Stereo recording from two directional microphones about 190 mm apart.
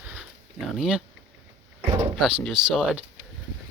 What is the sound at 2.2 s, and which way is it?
Speech, 5° right (ahead or behind).